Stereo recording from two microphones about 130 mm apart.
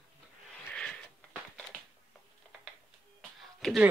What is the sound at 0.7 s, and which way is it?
Sniff, 10° left (ahead or behind).